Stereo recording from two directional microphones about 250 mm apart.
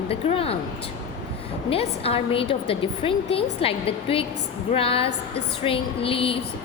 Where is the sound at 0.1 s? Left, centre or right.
Left.